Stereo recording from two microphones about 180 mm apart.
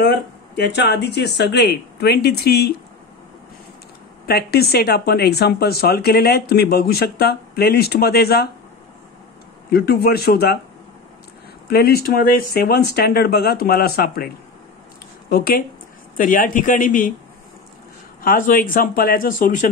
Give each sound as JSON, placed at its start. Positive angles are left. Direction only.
{"t": 0.0, "sound": "speech", "side_deg": 70}
{"t": 4.3, "sound": "speech", "side_deg": 60}
{"t": 9.7, "sound": "speech", "side_deg": 60}
{"t": 11.7, "sound": "speech", "side_deg": 60}
{"t": 18.2, "sound": "speech", "side_deg": 50}